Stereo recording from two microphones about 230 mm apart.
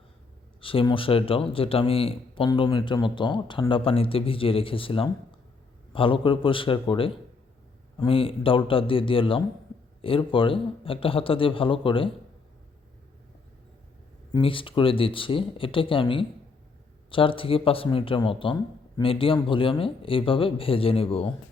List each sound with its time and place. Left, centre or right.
0.6 s speech: left
14.3 s speech: left